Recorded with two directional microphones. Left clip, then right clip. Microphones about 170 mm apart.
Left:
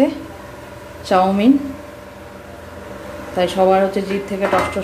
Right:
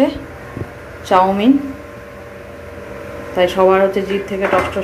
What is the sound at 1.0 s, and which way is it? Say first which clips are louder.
Speech: right 2 dB; 5° left (ahead or behind).